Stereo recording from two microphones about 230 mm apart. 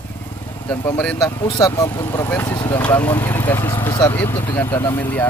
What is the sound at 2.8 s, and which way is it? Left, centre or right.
Speech, centre.